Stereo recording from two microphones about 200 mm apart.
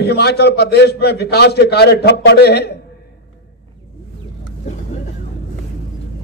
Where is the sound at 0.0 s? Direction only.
55° left (ahead or behind).